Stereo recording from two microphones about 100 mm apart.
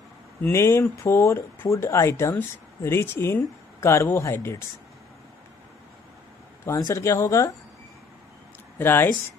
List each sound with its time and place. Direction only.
0.4 s speech: 30° left (ahead or behind)
6.9 s speech: 30° left (ahead or behind)
8.7 s speech: 20° left (ahead or behind)